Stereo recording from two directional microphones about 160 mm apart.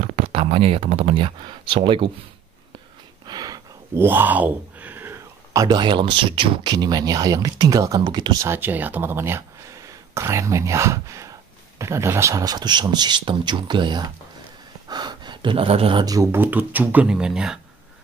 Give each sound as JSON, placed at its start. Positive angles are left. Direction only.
{"t": 0.0, "sound": "speech", "side_deg": -40}
{"t": 3.3, "sound": "a man's voice", "side_deg": -25}